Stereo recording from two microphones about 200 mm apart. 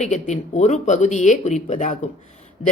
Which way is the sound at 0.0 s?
35° left (ahead or behind).